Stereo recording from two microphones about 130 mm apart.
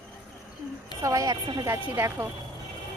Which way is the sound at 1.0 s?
25° right (ahead or behind).